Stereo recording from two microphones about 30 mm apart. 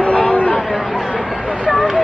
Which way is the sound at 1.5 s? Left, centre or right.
Right.